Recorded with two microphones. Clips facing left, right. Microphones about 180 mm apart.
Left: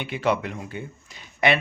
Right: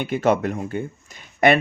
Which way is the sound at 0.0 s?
45° right (ahead or behind).